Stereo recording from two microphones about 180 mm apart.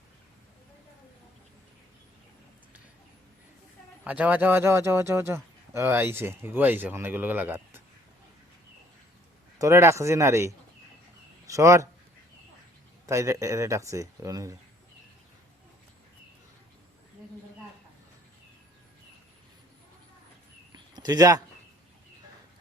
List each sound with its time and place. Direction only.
4.0 s a man's voice: 10° right (ahead or behind)
9.6 s a man's voice: 15° right (ahead or behind)
13.1 s a man's voice: 15° right (ahead or behind)
20.7 s a sound: 20° right (ahead or behind)